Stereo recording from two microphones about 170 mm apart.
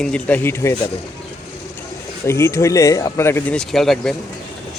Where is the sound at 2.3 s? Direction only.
15° left (ahead or behind).